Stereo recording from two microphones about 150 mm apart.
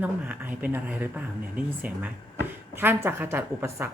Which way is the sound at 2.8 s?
15° right (ahead or behind).